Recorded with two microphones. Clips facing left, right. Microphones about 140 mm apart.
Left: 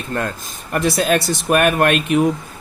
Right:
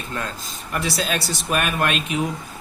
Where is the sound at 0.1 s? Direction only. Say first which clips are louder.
Left 7 dB; 50° left (ahead or behind).